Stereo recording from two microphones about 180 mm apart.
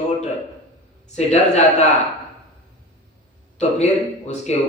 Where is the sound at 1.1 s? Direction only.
40° left (ahead or behind).